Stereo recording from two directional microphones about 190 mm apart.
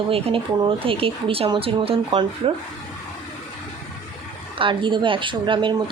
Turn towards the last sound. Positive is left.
turn(degrees=-25)  # may be behind; listen again after turning